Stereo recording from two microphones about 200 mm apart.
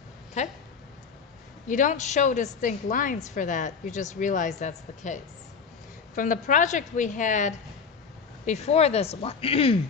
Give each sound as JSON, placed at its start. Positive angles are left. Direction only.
{"t": 0.4, "sound": "speech", "side_deg": 35}
{"t": 1.7, "sound": "speech", "side_deg": 40}